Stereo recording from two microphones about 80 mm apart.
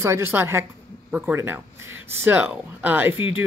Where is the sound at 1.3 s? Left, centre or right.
Right.